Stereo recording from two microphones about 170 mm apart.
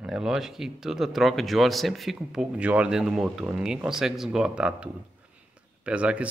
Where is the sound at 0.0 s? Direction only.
5° right (ahead or behind).